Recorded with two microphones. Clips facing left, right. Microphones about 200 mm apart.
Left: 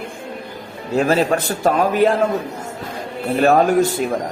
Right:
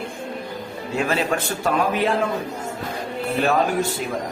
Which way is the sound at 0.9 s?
40° left (ahead or behind).